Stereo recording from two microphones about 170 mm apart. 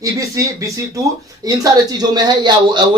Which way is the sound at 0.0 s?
20° right (ahead or behind).